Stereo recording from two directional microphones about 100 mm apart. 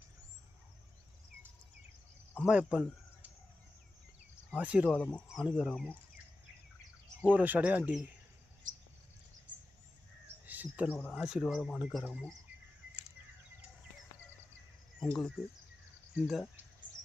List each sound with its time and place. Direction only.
2.4 s speech: 10° right (ahead or behind)
4.5 s speech: 15° right (ahead or behind)
4.9 s speech: 10° left (ahead or behind)
5.3 s speech: 5° right (ahead or behind)
7.2 s speech: 15° right (ahead or behind)
10.4 s a sound: 15° right (ahead or behind)
10.9 s speech: 15° left (ahead or behind)
11.2 s speech: 5° right (ahead or behind)
16.1 s speech: centre (ahead or behind)